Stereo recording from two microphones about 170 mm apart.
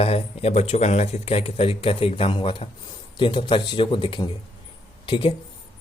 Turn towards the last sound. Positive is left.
turn(degrees=30)  # may be behind; listen again after turning